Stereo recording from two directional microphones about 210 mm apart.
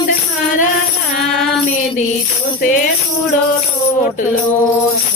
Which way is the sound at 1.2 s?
Centre (ahead or behind).